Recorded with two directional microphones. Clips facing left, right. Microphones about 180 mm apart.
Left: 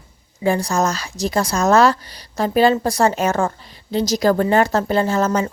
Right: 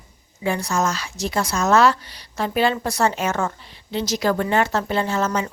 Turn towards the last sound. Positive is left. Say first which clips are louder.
# left 4 dB
turn(degrees=40)  # may be behind; listen again after turning